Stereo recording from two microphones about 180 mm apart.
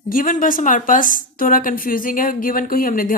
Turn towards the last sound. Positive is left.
turn(degrees=50)  # may be behind; listen again after turning